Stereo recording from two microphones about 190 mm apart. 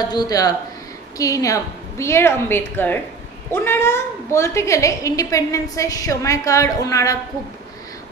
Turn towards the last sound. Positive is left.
turn(degrees=15)  # may be behind; listen again after turning